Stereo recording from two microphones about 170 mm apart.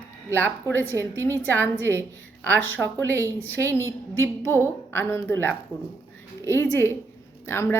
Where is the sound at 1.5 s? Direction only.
10° left (ahead or behind).